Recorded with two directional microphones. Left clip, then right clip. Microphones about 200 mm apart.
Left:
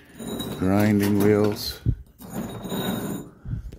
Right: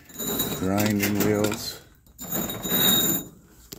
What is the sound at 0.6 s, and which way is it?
Pigeon, 40° left (ahead or behind).